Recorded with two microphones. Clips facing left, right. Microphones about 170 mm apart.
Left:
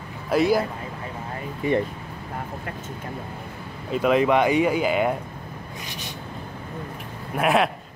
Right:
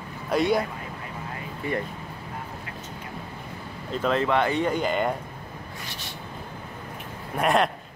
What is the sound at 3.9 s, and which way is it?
Speech, 10° left (ahead or behind).